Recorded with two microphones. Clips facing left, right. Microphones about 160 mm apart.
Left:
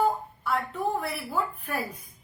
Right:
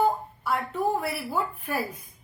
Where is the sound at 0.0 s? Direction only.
5° right (ahead or behind).